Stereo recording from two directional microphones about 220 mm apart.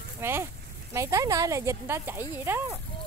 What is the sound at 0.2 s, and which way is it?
Speech, 10° right (ahead or behind).